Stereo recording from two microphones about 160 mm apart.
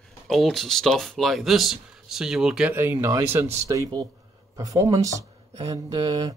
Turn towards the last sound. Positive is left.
turn(degrees=-25)  # may be behind; listen again after turning